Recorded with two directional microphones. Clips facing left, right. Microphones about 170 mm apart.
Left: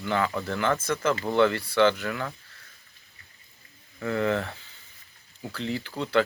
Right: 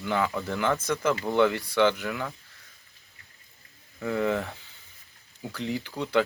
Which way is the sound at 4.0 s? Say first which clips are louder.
Left 1 dB; 15° right (ahead or behind).